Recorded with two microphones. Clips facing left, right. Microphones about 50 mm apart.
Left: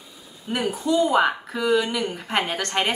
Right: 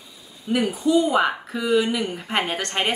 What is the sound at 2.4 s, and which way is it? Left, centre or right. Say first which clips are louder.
Speech: even; centre.